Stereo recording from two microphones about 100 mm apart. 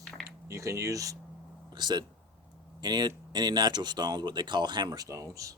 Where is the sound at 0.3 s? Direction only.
30° right (ahead or behind).